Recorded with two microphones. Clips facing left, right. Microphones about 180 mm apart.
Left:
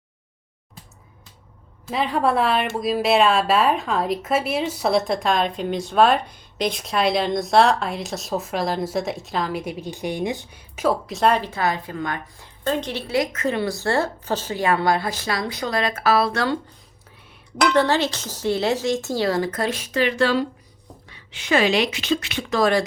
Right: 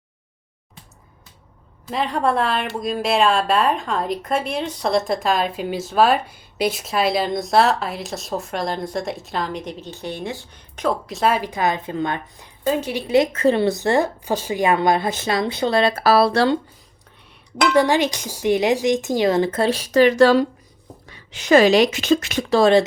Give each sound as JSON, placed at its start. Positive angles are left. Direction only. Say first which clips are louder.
{"t": 1.9, "sound": "speech", "louder": "even", "side_deg": 0}
{"t": 10.8, "sound": "speech", "louder": "left 1 dB", "side_deg": 0}
{"t": 12.6, "sound": "speech", "louder": "right 3 dB", "side_deg": -10}
{"t": 13.3, "sound": "a woman's voice", "louder": "right 6 dB", "side_deg": -30}
{"t": 17.7, "sound": "a woman's voice", "louder": "right 3 dB", "side_deg": -10}